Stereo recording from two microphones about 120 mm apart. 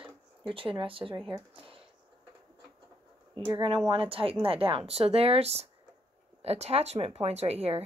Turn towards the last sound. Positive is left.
turn(degrees=-55)  # may be behind; listen again after turning